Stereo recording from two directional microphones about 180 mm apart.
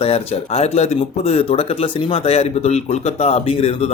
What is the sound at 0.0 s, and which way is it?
Speech, 35° left (ahead or behind).